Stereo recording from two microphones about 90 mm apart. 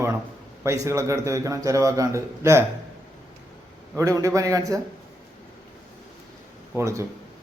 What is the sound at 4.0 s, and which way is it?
Speech, 35° right (ahead or behind).